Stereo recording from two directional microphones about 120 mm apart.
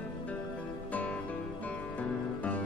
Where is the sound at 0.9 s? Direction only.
10° left (ahead or behind).